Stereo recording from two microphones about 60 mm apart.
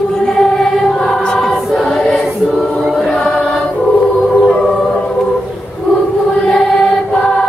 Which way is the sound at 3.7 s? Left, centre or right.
Centre.